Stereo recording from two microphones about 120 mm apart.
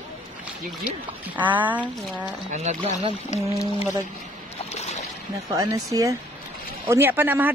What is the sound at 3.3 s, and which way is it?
Speech, 65° left (ahead or behind).